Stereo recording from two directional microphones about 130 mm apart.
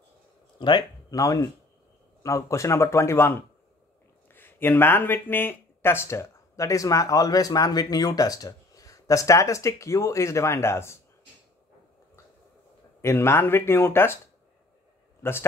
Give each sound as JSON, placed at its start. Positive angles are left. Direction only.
{"t": 0.6, "sound": "speech", "side_deg": 35}
{"t": 13.0, "sound": "speech", "side_deg": 20}